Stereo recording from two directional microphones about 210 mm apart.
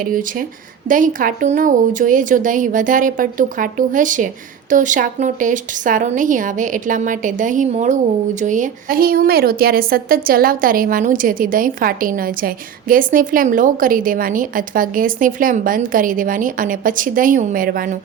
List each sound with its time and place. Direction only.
0.0 s a woman's voice: 40° right (ahead or behind)